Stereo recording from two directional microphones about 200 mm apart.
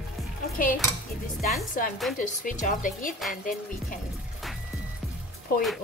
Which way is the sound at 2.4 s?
40° left (ahead or behind).